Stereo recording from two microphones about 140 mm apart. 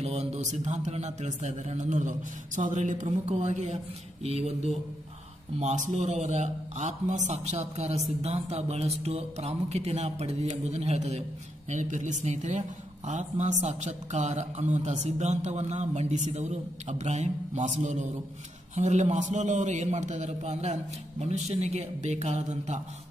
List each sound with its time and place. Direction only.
0.0 s a woman's voice: 50° right (ahead or behind)